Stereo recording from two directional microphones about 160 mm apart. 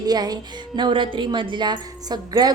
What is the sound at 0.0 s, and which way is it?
Music, 25° right (ahead or behind).